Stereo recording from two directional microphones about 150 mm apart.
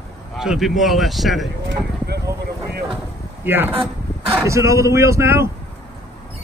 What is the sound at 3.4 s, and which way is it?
Speech, 15° right (ahead or behind).